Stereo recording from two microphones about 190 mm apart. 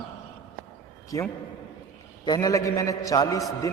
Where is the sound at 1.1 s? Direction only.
15° left (ahead or behind).